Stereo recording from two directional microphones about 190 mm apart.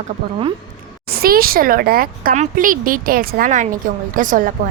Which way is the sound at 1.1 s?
50° right (ahead or behind).